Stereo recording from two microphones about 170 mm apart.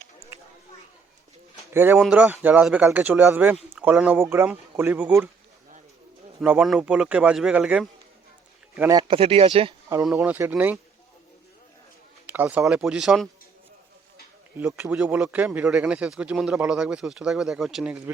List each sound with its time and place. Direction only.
1.7 s speech: 15° right (ahead or behind)
6.4 s speech: 5° right (ahead or behind)
8.9 s speech: 25° right (ahead or behind)
10.1 s speech: 10° right (ahead or behind)
12.2 s speech: 10° right (ahead or behind)
14.6 s speech: 15° right (ahead or behind)